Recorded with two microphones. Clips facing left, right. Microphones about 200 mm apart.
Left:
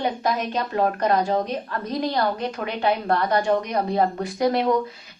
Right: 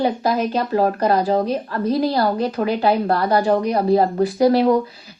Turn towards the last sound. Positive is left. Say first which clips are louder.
# right 6 dB
turn(degrees=-30)  # may be behind; listen again after turning